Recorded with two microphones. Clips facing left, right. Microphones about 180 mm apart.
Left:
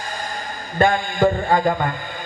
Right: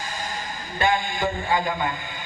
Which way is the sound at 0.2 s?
50° left (ahead or behind).